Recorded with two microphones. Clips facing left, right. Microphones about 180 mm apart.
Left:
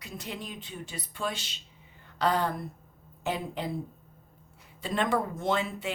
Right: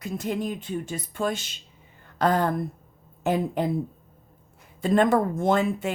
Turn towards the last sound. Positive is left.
turn(degrees=-50)  # may be behind; listen again after turning